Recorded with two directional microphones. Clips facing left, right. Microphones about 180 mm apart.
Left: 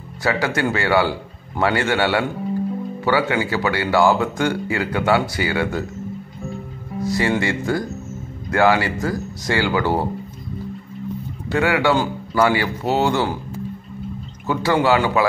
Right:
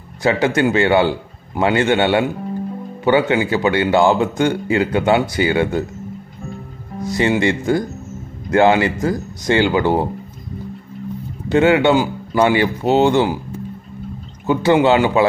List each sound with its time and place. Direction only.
0.2 s speech: 20° right (ahead or behind)
7.1 s speech: 20° right (ahead or behind)
11.4 s speech: 20° right (ahead or behind)
14.4 s speech: 20° right (ahead or behind)